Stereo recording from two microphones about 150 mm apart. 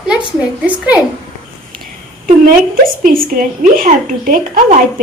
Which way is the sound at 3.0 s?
70° right (ahead or behind).